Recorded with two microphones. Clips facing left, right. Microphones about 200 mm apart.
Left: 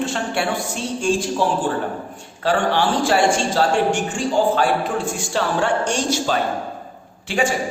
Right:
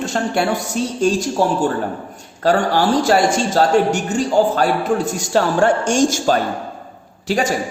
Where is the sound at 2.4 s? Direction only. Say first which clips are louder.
Right 3 dB; 40° right (ahead or behind).